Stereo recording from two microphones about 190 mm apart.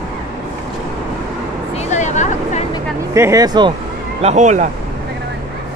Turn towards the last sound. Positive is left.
turn(degrees=-40)  # may be behind; listen again after turning